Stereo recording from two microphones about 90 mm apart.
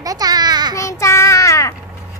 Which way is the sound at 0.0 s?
45° right (ahead or behind).